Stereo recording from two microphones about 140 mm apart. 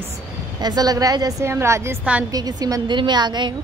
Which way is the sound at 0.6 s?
30° right (ahead or behind).